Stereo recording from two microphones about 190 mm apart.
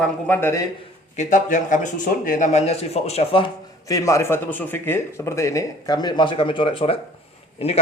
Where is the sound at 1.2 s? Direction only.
40° left (ahead or behind).